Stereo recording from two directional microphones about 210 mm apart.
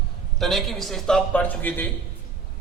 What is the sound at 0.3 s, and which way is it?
A man's voice, centre (ahead or behind).